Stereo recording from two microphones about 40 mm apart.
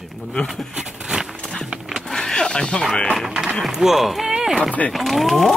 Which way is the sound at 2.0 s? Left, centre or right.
Centre.